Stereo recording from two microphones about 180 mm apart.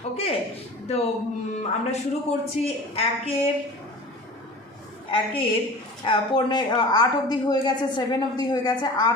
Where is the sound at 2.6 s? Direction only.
35° left (ahead or behind).